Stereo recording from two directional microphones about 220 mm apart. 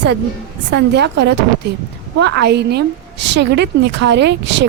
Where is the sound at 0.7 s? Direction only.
50° right (ahead or behind).